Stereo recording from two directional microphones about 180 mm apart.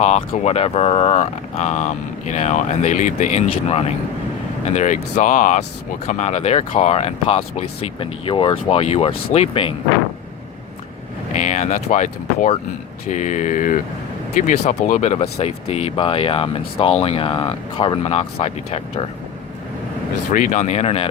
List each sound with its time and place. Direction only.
0.0 s speech: 35° left (ahead or behind)
11.3 s speech: 40° left (ahead or behind)
13.1 s a sound: 40° left (ahead or behind)
14.3 s speech: 45° left (ahead or behind)
20.3 s speech: 45° left (ahead or behind)